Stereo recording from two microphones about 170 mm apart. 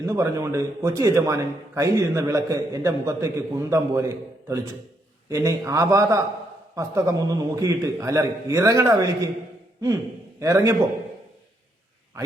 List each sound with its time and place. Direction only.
0.0 s a man's voice: 20° right (ahead or behind)
10.4 s a man's voice: 20° right (ahead or behind)